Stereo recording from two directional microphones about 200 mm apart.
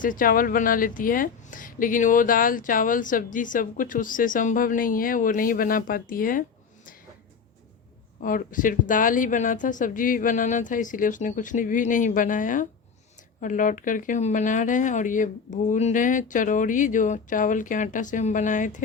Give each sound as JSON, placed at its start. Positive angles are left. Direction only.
{"t": 0.0, "sound": "speech", "side_deg": 45}
{"t": 8.2, "sound": "speech", "side_deg": 40}